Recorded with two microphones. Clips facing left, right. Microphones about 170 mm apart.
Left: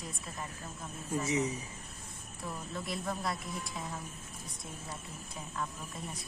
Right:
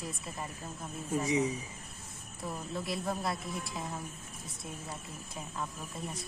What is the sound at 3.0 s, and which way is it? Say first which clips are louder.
Speech: right 1 dB; 25° right (ahead or behind).